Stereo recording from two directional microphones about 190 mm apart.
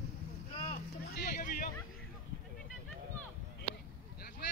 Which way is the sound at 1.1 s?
50° left (ahead or behind).